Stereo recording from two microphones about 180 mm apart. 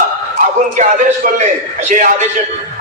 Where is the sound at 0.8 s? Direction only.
45° right (ahead or behind).